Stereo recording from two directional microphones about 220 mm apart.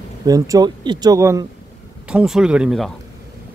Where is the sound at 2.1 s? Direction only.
5° right (ahead or behind).